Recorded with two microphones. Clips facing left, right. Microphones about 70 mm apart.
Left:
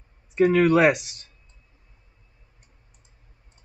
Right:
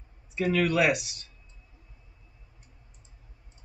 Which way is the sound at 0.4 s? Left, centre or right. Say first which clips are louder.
Left 7 dB; left.